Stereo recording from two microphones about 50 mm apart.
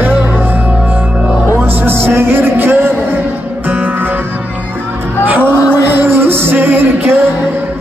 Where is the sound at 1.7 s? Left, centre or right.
Right.